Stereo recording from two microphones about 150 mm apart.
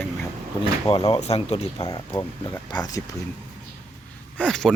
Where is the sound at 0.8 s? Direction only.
40° left (ahead or behind).